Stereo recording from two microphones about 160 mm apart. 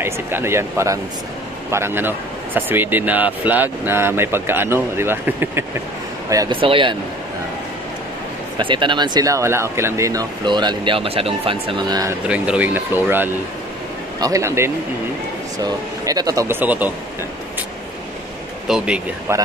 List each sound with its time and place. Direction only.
0.0 s speech: 15° right (ahead or behind)
6.6 s speech: 30° right (ahead or behind)
8.5 s speech: 30° right (ahead or behind)
12.3 s speech: 10° right (ahead or behind)
18.7 s speech: 5° right (ahead or behind)
19.3 s speech: 15° right (ahead or behind)